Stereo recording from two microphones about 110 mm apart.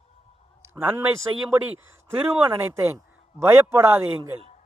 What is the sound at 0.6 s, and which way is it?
A man's voice, 25° right (ahead or behind).